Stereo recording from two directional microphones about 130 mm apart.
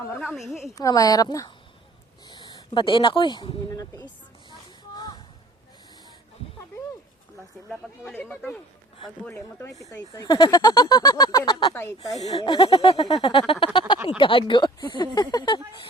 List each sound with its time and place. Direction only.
0.2 s a woman's voice: centre (ahead or behind)
0.8 s speech: 25° left (ahead or behind)
3.8 s a sound: 30° left (ahead or behind)
8.1 s speech: 15° left (ahead or behind); by 11.7 s 30° left (ahead or behind)
11.7 s speech: 20° left (ahead or behind)
12.3 s speech: 40° left (ahead or behind)